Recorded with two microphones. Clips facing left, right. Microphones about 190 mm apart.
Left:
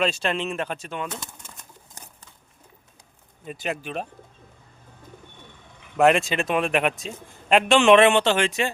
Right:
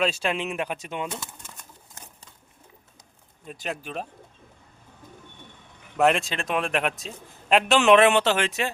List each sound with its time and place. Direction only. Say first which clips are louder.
0.0 s speech: left 1 dB; 10° right (ahead or behind)
3.4 s a man's voice: left 3 dB; 5° left (ahead or behind)
6.0 s a man's voice: left 3 dB; centre (ahead or behind)